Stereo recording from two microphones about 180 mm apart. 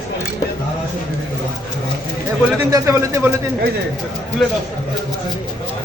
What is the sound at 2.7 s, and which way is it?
Speech, 20° right (ahead or behind).